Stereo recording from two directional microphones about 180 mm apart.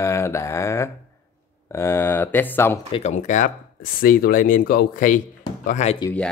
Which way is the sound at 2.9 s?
40° left (ahead or behind).